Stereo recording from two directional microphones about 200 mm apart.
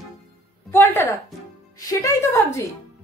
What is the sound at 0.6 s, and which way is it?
A woman's voice, 10° left (ahead or behind).